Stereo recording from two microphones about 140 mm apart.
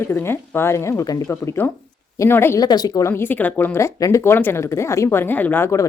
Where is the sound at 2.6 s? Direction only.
30° left (ahead or behind).